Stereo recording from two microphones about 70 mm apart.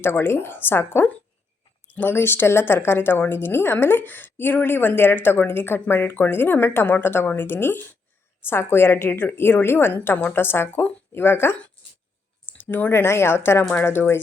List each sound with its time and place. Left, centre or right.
0.0 s a woman's voice: left
2.0 s a woman's voice: left
12.5 s a woman's voice: left